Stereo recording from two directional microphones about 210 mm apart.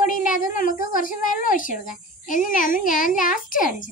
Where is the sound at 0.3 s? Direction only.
40° left (ahead or behind).